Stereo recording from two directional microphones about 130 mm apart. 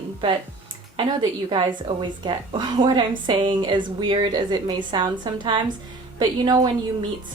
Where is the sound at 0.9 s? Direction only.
35° right (ahead or behind).